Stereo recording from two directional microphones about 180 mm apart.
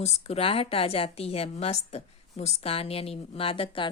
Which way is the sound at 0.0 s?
35° left (ahead or behind).